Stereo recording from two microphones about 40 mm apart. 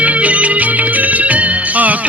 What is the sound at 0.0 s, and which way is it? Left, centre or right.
Music, right.